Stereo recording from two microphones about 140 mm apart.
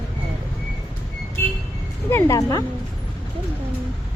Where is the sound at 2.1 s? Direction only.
20° left (ahead or behind).